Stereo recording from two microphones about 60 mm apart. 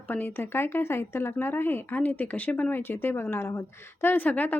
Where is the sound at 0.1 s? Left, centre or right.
Left.